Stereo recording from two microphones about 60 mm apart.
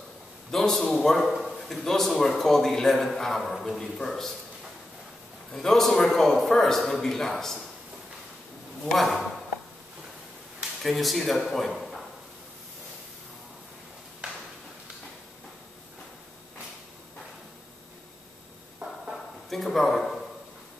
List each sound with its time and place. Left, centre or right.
0.5 s a man's voice: centre
5.5 s a man's voice: centre
8.9 s a man's voice: centre
10.8 s speech: centre
14.2 s a sound: centre
18.8 s a sound: centre
19.5 s a man's voice: centre